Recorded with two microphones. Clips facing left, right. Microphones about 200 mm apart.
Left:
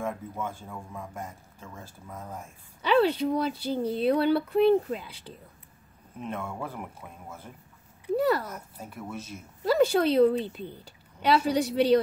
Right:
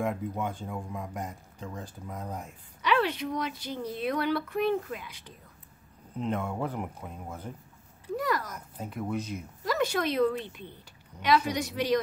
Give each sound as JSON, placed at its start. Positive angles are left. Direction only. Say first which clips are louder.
{"t": 0.0, "sound": "speech", "louder": "right 2 dB", "side_deg": -15}
{"t": 2.8, "sound": "speech", "louder": "left 5 dB", "side_deg": 30}
{"t": 6.1, "sound": "speech", "louder": "right 4 dB", "side_deg": -20}
{"t": 8.2, "sound": "speech", "louder": "left 5 dB", "side_deg": 30}
{"t": 8.7, "sound": "speech", "louder": "right 9 dB", "side_deg": -20}
{"t": 9.7, "sound": "speech", "louder": "left 6 dB", "side_deg": 30}